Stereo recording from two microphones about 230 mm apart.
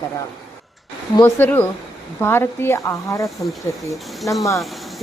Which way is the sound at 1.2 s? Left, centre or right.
Centre.